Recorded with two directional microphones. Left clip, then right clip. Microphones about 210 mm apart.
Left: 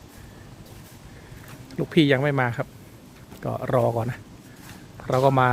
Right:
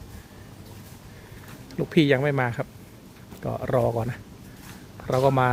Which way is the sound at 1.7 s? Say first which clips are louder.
Left 1 dB; centre (ahead or behind).